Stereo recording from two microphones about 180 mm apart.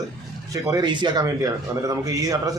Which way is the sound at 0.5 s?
20° right (ahead or behind).